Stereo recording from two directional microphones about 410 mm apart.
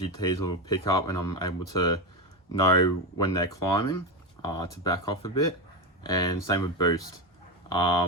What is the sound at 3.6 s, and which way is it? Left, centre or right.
Speech, left.